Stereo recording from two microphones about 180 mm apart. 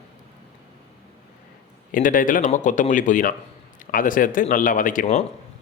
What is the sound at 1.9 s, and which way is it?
A man's voice, 50° left (ahead or behind).